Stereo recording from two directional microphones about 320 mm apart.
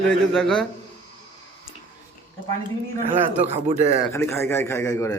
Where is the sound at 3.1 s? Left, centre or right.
Centre.